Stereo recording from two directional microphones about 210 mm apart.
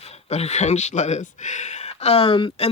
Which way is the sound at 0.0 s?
30° left (ahead or behind).